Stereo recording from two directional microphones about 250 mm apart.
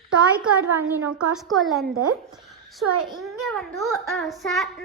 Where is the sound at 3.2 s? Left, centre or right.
Centre.